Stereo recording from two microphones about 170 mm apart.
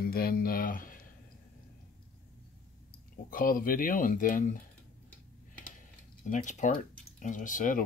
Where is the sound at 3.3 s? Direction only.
55° left (ahead or behind).